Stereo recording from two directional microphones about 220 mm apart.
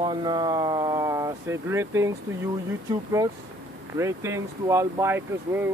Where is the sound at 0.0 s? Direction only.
20° right (ahead or behind).